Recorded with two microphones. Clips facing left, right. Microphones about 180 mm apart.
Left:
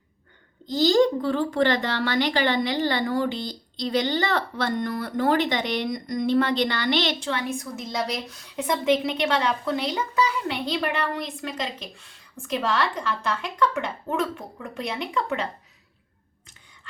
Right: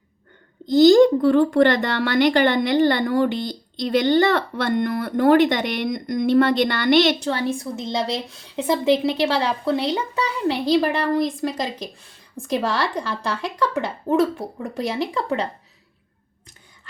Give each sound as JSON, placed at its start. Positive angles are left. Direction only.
{"t": 0.8, "sound": "speech", "side_deg": -50}